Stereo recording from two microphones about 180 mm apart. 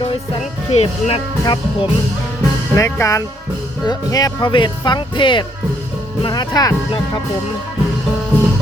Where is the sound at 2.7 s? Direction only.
15° left (ahead or behind).